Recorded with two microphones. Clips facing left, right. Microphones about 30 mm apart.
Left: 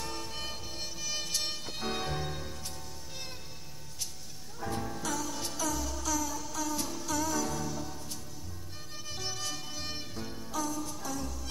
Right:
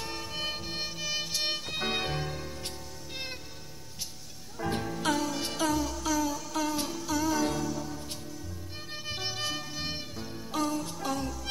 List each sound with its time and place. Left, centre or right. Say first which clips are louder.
0.0 s music: right 3 dB; centre
1.2 s music: right 1 dB; centre
1.5 s music: right 5 dB; right
2.2 s music: right 2 dB; centre
4.6 s music: right 5 dB; centre
5.0 s music: right 6 dB; right
5.8 s music: right 4 dB; right
6.9 s music: right 3 dB; centre
7.6 s music: right 4 dB; centre
9.0 s music: right 4 dB; right
10.1 s music: right 1 dB; centre
10.5 s music: right 5 dB; right